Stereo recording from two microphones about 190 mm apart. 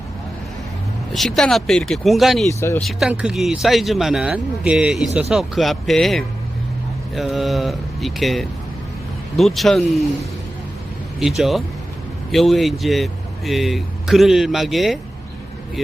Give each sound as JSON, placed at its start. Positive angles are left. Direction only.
{"t": 1.1, "sound": "speech", "side_deg": 0}
{"t": 2.5, "sound": "speech", "side_deg": 15}
{"t": 2.8, "sound": "speech", "side_deg": -5}
{"t": 11.2, "sound": "speech", "side_deg": 0}